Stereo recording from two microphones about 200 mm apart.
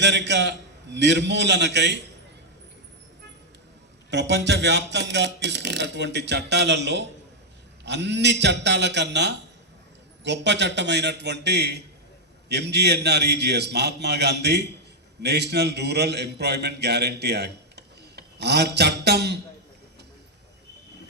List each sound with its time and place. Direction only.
0.0 s a man's voice: 60° right (ahead or behind)
4.1 s a man's voice: 60° right (ahead or behind)